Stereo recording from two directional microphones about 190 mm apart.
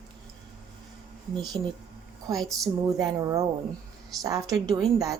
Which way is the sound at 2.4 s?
Centre (ahead or behind).